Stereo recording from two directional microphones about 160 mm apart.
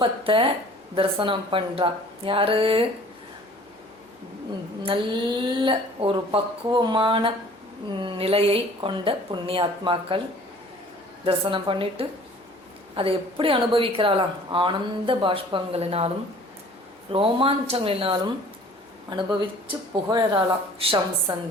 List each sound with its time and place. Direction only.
0.0 s a woman's voice: 30° right (ahead or behind)
4.8 s a woman's voice: 30° right (ahead or behind)
11.2 s a woman's voice: 35° right (ahead or behind)